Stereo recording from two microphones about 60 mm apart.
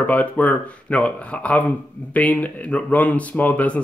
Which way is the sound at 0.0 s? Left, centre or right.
Left.